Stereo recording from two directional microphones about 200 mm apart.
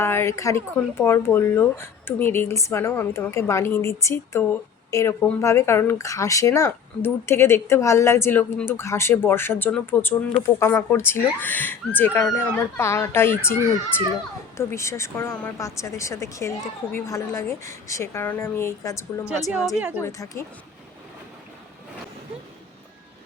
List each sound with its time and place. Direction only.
0.0 s speech: 10° left (ahead or behind)
14.6 s speech: 15° left (ahead or behind)
19.5 s a woman's voice: 5° right (ahead or behind)
20.0 s speech: 15° left (ahead or behind)